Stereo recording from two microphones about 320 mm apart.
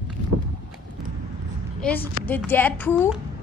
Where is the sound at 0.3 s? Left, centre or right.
Right.